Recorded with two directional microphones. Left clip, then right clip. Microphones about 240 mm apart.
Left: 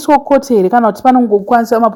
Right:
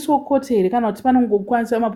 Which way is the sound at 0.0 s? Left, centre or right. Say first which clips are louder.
Left 8 dB; left.